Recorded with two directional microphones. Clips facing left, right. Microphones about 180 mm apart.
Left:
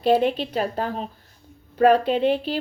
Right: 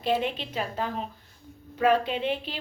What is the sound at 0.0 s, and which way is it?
Speech, 40° left (ahead or behind).